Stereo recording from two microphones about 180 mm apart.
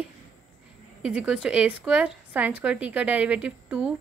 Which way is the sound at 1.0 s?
5° right (ahead or behind).